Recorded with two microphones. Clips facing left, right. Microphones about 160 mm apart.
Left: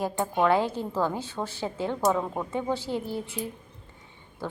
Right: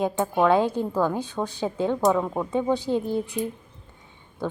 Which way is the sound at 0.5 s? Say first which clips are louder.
Right 4 dB; 15° right (ahead or behind).